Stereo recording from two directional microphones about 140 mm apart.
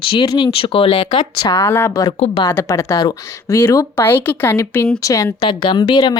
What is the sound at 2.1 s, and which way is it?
Speech, 50° left (ahead or behind).